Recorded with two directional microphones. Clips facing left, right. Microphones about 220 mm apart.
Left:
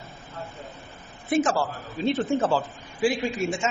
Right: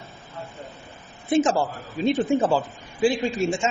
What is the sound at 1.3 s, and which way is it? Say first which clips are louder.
A man's voice: right 3 dB; 25° right (ahead or behind).